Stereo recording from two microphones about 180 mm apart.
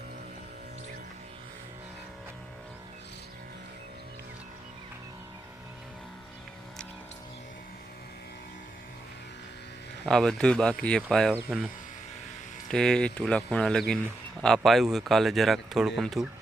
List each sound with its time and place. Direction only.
10.0 s speech: 5° left (ahead or behind)
12.7 s speech: 5° left (ahead or behind)